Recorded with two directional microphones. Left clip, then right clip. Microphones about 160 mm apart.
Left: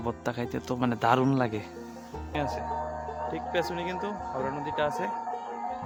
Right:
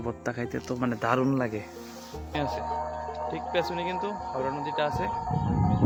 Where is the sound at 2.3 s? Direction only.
5° left (ahead or behind).